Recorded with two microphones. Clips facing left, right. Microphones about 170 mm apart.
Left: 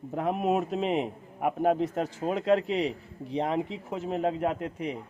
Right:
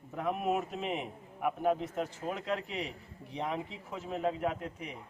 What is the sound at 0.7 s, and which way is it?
A man's voice, 90° left.